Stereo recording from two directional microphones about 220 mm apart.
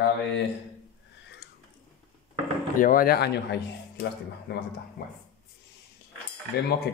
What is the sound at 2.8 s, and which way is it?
Speech, 40° left (ahead or behind).